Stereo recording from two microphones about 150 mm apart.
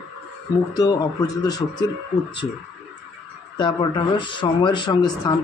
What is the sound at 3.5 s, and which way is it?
Speech, 30° left (ahead or behind).